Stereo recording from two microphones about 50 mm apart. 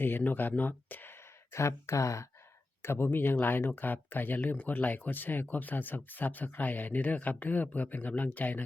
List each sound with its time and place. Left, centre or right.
0.0 s speech: left
1.5 s speech: left
2.8 s speech: left
4.4 s speech: left